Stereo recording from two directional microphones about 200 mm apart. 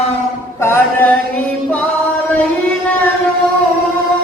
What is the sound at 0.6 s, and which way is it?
Chant, 10° left (ahead or behind).